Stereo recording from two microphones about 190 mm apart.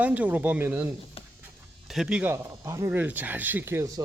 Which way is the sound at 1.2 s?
30° left (ahead or behind).